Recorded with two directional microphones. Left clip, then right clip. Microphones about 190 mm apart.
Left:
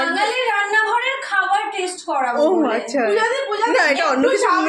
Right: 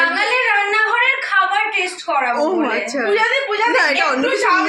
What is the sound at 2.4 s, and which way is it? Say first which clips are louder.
A woman's voice: left 1 dB; 5° left (ahead or behind).